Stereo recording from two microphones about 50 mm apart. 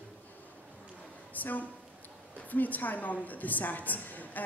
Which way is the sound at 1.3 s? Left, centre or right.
Left.